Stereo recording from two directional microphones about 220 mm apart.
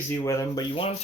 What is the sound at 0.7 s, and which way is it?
Speech, 25° left (ahead or behind).